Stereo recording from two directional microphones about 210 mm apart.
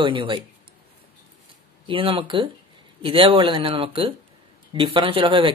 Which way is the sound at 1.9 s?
25° right (ahead or behind).